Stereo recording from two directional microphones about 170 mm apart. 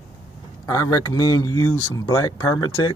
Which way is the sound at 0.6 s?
20° left (ahead or behind).